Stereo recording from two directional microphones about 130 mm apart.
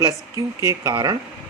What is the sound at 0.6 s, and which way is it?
Speech, 25° right (ahead or behind).